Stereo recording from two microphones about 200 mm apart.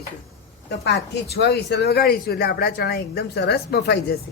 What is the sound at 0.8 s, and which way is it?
Speech, 55° left (ahead or behind).